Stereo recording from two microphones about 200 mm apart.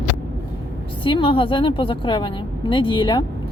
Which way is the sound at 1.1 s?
25° left (ahead or behind).